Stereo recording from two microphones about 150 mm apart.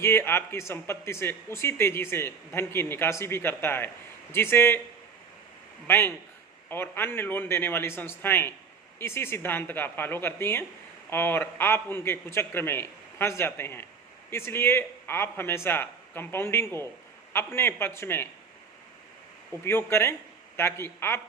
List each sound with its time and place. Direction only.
0.0 s speech: 15° left (ahead or behind)
5.9 s speech: 15° left (ahead or behind)
19.6 s speech: 15° left (ahead or behind)